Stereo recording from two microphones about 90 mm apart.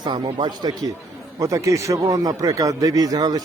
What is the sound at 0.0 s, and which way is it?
A man's voice, 50° right (ahead or behind).